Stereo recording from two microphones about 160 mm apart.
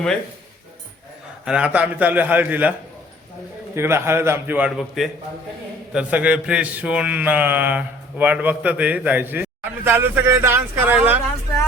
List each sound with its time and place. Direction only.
1.5 s a man's voice: 5° right (ahead or behind)
3.8 s a man's voice: 15° right (ahead or behind)